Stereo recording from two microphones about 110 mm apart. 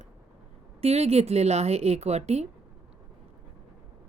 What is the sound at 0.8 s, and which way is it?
Speech, 70° right (ahead or behind).